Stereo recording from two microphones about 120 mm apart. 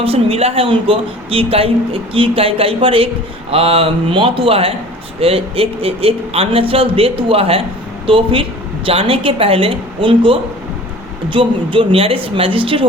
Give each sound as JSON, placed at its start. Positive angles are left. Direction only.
{"t": 0.0, "sound": "speech", "side_deg": -55}